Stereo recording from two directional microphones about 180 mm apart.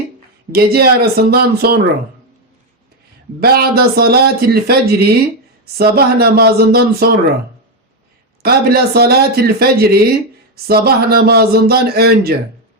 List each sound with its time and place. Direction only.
0.5 s speech: 60° right (ahead or behind)
3.4 s speech: 60° right (ahead or behind)
8.4 s speech: 60° right (ahead or behind)